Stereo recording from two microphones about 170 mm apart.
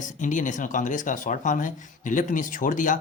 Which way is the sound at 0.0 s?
50° left (ahead or behind).